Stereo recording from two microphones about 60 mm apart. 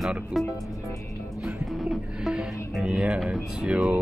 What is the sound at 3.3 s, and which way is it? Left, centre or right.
Speech, right.